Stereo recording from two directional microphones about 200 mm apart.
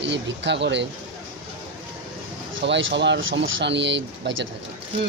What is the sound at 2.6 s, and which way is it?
Speech, 65° right (ahead or behind).